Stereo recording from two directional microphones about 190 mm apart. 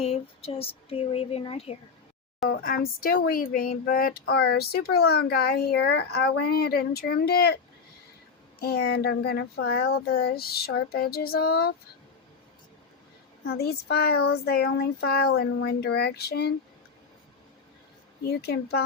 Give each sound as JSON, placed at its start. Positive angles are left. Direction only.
{"t": 0.0, "sound": "speech", "side_deg": 30}
{"t": 2.5, "sound": "speech", "side_deg": 55}
{"t": 8.6, "sound": "speech", "side_deg": 60}
{"t": 10.7, "sound": "female singing", "side_deg": 55}
{"t": 13.5, "sound": "speech", "side_deg": 55}
{"t": 18.2, "sound": "speech", "side_deg": 60}